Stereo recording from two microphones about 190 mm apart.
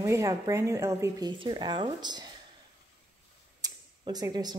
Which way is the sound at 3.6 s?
20° right (ahead or behind).